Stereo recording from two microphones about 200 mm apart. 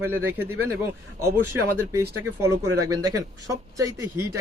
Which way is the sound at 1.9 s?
15° right (ahead or behind).